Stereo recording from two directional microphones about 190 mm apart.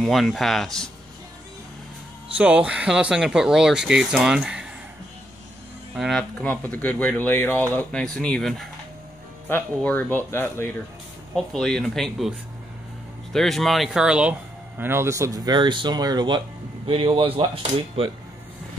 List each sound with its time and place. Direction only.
0.0 s speech: centre (ahead or behind)
2.3 s speech: 5° right (ahead or behind)
5.9 s speech: centre (ahead or behind); by 18.1 s 30° right (ahead or behind)